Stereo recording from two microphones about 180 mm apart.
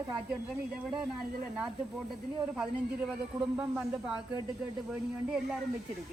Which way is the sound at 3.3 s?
5° right (ahead or behind).